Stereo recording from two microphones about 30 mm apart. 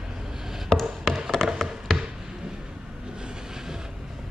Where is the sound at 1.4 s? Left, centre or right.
Centre.